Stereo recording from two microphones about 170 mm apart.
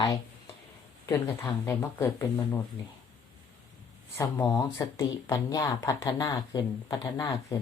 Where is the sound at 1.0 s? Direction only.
20° left (ahead or behind).